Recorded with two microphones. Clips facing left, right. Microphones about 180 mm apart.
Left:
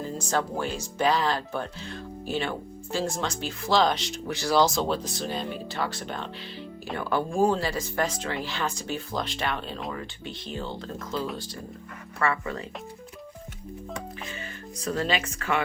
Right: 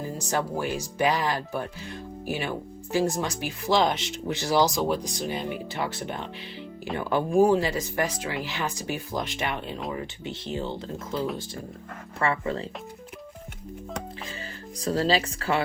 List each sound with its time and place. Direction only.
0.2 s speech: 15° right (ahead or behind)
14.8 s speech: 35° right (ahead or behind)